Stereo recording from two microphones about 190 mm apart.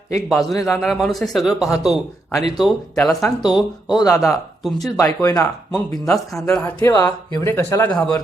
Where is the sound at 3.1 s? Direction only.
15° left (ahead or behind).